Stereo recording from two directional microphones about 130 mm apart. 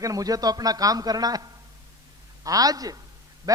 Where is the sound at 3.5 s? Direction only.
30° right (ahead or behind).